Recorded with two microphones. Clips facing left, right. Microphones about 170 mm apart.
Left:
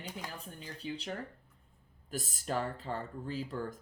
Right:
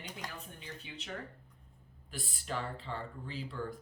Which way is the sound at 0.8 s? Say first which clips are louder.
Left 10 dB; 40° left (ahead or behind).